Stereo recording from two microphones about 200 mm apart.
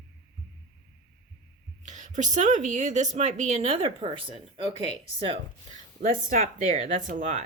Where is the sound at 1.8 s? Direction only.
35° right (ahead or behind).